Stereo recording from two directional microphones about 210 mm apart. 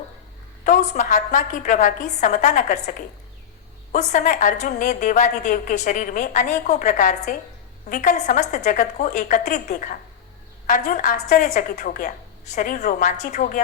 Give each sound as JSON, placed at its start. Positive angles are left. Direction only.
{"t": 0.6, "sound": "a woman's voice", "side_deg": 35}
{"t": 3.9, "sound": "a woman's voice", "side_deg": 40}